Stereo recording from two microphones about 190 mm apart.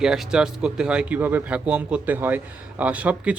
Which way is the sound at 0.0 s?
5° right (ahead or behind).